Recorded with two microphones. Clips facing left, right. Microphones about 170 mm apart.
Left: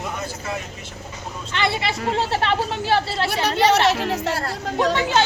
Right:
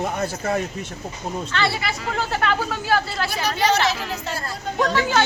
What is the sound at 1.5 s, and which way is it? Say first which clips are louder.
A woman's voice: left 3 dB; 20° left (ahead or behind).